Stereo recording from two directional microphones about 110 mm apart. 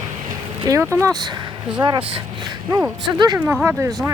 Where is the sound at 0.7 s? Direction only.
25° right (ahead or behind).